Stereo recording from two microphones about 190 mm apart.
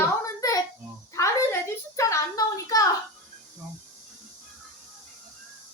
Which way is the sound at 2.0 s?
15° left (ahead or behind).